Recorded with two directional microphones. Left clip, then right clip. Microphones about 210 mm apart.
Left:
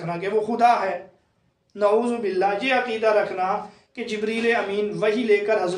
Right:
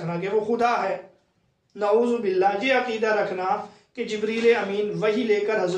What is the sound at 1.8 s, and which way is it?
A man's voice, 40° left (ahead or behind).